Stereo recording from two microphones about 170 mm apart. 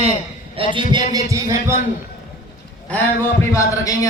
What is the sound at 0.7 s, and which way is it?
A man's voice, 25° right (ahead or behind).